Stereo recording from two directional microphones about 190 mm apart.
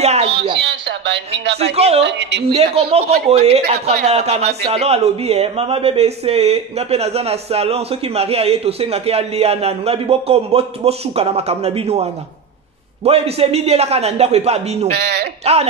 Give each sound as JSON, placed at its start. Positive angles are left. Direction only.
{"t": 0.0, "sound": "speech", "side_deg": -35}
{"t": 0.7, "sound": "speech", "side_deg": -65}
{"t": 1.6, "sound": "speech", "side_deg": -30}
{"t": 2.0, "sound": "speech", "side_deg": -65}
{"t": 2.5, "sound": "speech", "side_deg": -30}
{"t": 15.0, "sound": "speech", "side_deg": -60}
{"t": 15.5, "sound": "speech", "side_deg": -35}